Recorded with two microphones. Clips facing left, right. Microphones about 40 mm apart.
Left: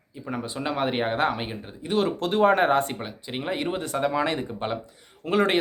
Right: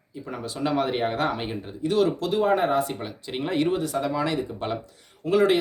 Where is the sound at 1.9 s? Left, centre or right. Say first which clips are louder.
Right 1 dB; left.